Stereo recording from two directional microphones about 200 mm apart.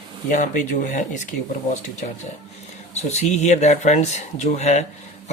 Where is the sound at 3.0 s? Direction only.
35° left (ahead or behind).